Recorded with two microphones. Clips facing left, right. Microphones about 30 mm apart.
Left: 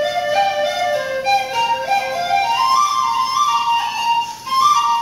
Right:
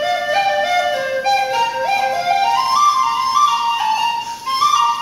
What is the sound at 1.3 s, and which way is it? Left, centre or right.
Music, centre.